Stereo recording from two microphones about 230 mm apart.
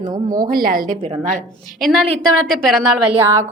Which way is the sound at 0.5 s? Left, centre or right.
Right.